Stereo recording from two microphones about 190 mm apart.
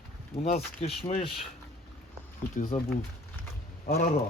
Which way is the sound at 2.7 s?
35° left (ahead or behind).